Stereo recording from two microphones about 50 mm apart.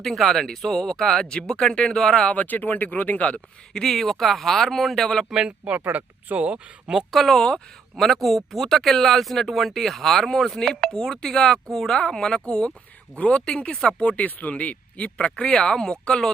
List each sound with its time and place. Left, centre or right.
0.0 s speech: centre
2.3 s speech: left
3.7 s speech: centre
5.3 s speech: centre
5.9 s speech: right
6.4 s speech: right
7.1 s speech: centre; by 15.3 s left
15.4 s speech: centre